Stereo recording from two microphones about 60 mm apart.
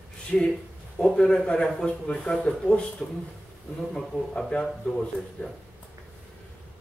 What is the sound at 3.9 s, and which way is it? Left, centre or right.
A man's voice, centre.